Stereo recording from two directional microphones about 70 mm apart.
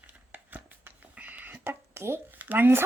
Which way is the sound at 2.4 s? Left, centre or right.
Right.